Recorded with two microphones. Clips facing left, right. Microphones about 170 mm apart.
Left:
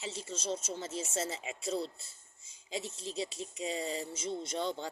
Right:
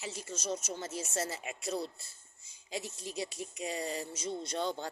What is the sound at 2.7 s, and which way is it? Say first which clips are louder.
Speech: left 1 dB; 25° left (ahead or behind).